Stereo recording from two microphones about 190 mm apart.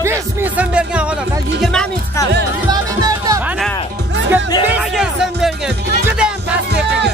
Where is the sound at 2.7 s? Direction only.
20° right (ahead or behind).